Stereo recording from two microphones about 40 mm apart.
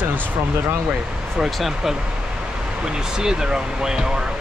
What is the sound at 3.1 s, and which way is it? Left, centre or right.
Speech, centre.